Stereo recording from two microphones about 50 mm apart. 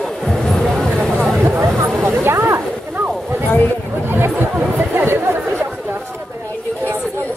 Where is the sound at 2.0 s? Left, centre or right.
Right.